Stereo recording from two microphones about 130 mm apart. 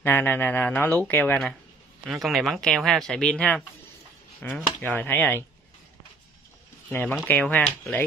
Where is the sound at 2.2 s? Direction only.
Centre (ahead or behind); by 5.4 s 15° left (ahead or behind).